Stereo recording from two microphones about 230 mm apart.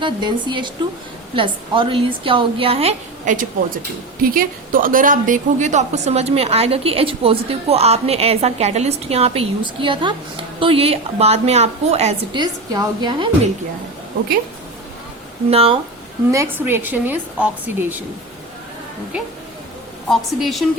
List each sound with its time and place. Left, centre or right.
0.0 s a woman's voice: centre
15.4 s a woman's voice: right
16.3 s a woman's voice: centre
20.1 s a woman's voice: centre